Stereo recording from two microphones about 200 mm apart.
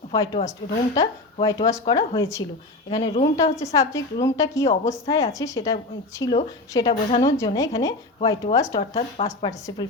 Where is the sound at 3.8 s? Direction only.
15° left (ahead or behind).